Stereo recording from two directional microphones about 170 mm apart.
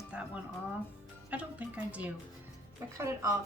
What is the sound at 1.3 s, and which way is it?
Speech, 10° right (ahead or behind).